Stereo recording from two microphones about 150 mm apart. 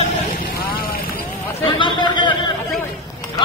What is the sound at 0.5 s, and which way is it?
Vehicle, 85° left.